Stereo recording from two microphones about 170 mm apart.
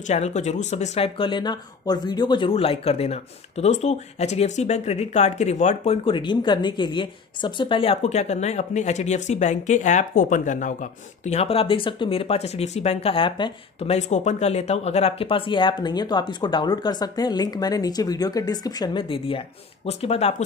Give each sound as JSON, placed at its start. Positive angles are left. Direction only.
{"t": 0.0, "sound": "speech", "side_deg": 40}